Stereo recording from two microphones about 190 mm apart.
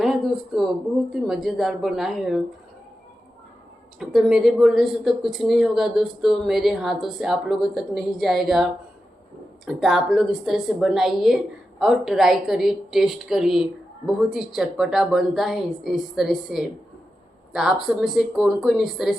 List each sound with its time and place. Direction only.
0.0 s speech: centre (ahead or behind)
4.0 s speech: centre (ahead or behind)